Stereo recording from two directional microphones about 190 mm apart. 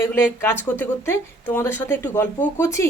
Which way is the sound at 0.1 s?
10° left (ahead or behind).